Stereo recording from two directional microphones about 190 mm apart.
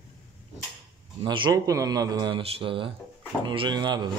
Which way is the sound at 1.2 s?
25° right (ahead or behind).